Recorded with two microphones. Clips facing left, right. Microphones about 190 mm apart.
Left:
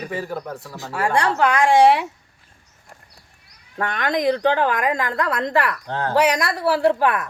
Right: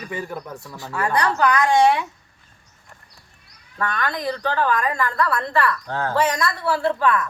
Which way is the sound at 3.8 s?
20° left (ahead or behind).